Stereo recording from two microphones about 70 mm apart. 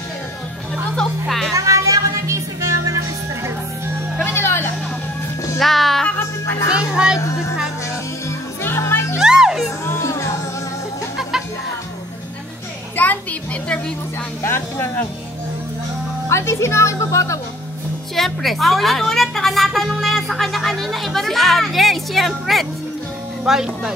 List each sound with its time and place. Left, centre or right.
1.5 s music: right
4.2 s a sound: left
5.6 s music: centre
6.1 s music: left
6.8 s speech: centre
7.2 s music: left
8.6 s music: left
9.2 s music: centre
9.8 s music: left
12.9 s a sound: left
14.4 s music: left
16.3 s speech: left
18.1 s a woman's voice: centre